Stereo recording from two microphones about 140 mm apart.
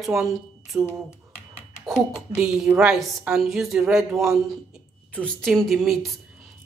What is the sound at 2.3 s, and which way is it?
A woman's voice, 5° right (ahead or behind).